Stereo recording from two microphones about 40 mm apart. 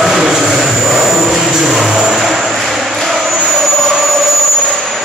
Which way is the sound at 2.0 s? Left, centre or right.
Right.